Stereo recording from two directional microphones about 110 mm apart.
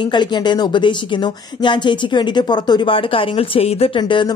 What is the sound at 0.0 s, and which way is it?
A woman's voice, 45° left (ahead or behind).